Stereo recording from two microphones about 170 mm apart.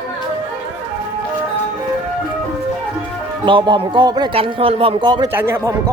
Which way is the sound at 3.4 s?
30° right (ahead or behind).